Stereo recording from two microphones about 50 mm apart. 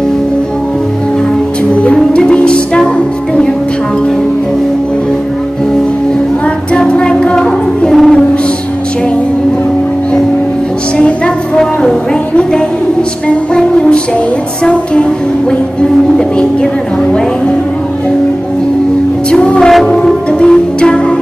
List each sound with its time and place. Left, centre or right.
2.0 s music: centre
6.7 s music: left
7.9 s music: centre
11.0 s music: left
13.6 s music: centre
19.4 s music: centre